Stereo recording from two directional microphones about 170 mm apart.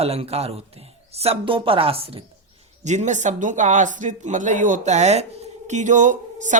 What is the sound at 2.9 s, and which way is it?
A man's voice, 45° right (ahead or behind).